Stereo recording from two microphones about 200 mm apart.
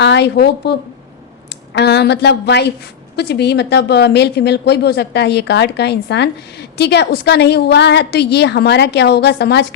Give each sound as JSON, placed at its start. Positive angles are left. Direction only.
{"t": 0.0, "sound": "a woman's voice", "side_deg": 60}